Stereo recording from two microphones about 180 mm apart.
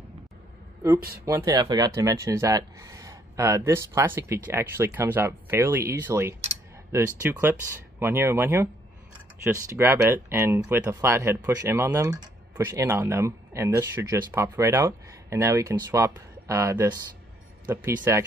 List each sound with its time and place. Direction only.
0.9 s speech: 55° right (ahead or behind)
1.2 s speech: 20° right (ahead or behind)